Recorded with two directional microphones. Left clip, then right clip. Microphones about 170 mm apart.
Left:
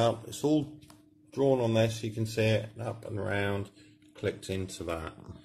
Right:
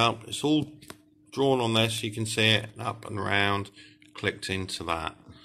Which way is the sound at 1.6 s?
Centre (ahead or behind).